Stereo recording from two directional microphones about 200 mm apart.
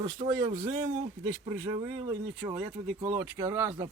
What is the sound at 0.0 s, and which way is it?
Speech, 20° right (ahead or behind).